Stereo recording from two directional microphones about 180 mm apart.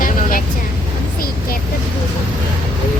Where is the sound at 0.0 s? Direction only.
50° left (ahead or behind).